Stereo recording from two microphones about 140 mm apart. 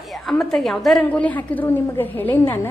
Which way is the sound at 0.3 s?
Centre (ahead or behind).